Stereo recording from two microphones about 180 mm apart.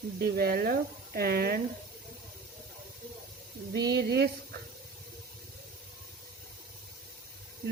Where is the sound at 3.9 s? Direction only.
65° right (ahead or behind).